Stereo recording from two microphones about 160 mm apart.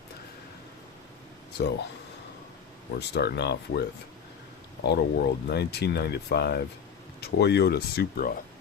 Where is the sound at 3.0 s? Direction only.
90° left.